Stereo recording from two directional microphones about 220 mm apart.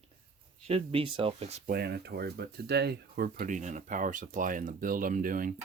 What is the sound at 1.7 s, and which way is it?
Speech, 45° right (ahead or behind).